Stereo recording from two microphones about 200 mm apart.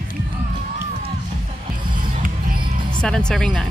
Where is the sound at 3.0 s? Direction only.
5° left (ahead or behind).